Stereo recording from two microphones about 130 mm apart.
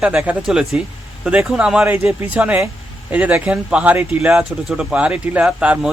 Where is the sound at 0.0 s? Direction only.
10° right (ahead or behind).